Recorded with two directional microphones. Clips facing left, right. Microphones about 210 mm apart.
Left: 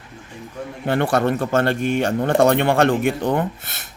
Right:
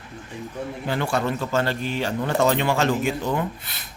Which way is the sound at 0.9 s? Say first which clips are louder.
Left 6 dB; 60° left (ahead or behind).